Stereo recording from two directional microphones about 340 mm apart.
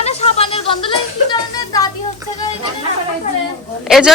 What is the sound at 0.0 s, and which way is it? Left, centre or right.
Music, centre.